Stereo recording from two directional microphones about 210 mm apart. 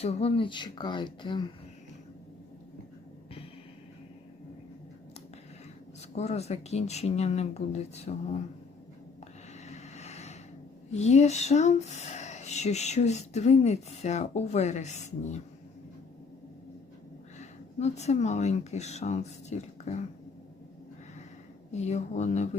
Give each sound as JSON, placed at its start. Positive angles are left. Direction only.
{"t": 0.0, "sound": "speech", "side_deg": 30}
{"t": 6.1, "sound": "speech", "side_deg": 30}
{"t": 9.6, "sound": "vehicle", "side_deg": 35}
{"t": 10.9, "sound": "speech", "side_deg": 35}
{"t": 17.3, "sound": "speech", "side_deg": 30}
{"t": 21.7, "sound": "speech", "side_deg": 30}